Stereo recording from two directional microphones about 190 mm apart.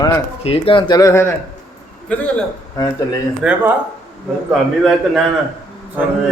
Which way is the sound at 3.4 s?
10° right (ahead or behind).